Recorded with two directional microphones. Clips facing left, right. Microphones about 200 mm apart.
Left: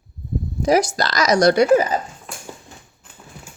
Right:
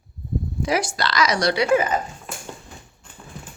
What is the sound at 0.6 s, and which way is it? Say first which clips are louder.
Speech: left 7 dB; 40° left (ahead or behind).